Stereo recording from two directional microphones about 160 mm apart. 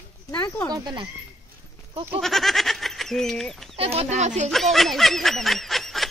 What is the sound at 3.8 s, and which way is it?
Speech, 40° right (ahead or behind).